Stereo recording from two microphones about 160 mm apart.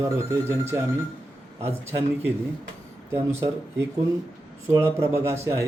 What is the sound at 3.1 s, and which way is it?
Speech, 15° right (ahead or behind).